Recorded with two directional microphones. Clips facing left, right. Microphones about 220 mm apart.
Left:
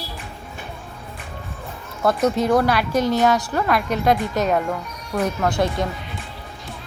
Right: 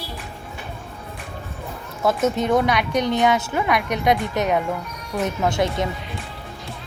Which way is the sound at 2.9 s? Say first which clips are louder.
Left 1 dB; 20° right (ahead or behind).